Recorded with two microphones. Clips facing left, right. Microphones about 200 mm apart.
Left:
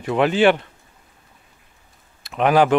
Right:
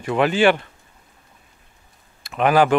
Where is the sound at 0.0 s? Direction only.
Centre (ahead or behind).